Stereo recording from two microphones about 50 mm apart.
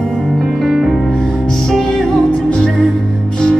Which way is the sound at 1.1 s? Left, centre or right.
Centre.